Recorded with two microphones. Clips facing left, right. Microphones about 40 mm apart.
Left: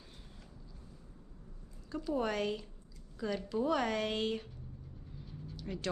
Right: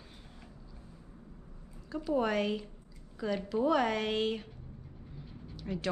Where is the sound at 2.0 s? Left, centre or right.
Centre.